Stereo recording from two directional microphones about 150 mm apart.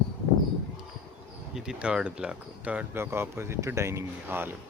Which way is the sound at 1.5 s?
5° right (ahead or behind).